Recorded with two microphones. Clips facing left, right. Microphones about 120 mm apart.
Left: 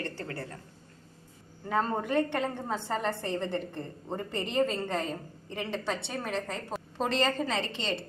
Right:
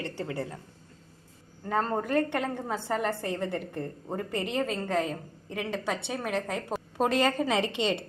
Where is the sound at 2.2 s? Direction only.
10° right (ahead or behind).